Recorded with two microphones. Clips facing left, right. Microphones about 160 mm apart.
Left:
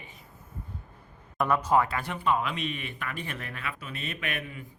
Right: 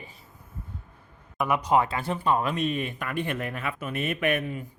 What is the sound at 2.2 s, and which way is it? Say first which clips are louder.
Speech: right 3 dB; 40° right (ahead or behind).